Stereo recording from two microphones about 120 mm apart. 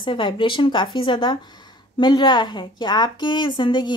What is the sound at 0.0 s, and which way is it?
Speech, 40° left (ahead or behind).